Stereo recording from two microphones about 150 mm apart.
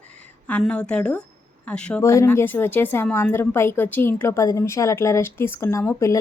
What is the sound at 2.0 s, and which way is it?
A woman's voice, 20° left (ahead or behind).